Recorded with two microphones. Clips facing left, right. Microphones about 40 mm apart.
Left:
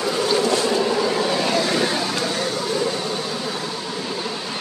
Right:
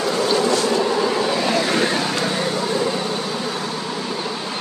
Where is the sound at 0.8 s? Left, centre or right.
Centre.